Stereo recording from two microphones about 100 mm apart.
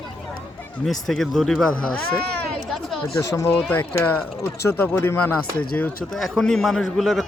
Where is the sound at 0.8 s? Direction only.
Centre (ahead or behind).